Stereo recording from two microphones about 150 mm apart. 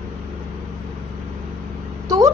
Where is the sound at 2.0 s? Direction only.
25° right (ahead or behind).